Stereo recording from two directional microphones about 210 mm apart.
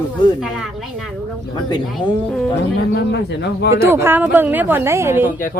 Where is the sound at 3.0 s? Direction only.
55° left (ahead or behind).